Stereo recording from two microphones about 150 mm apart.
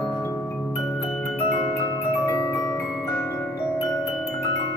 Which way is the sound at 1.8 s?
25° left (ahead or behind).